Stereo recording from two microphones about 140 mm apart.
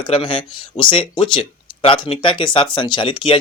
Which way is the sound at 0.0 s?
35° left (ahead or behind).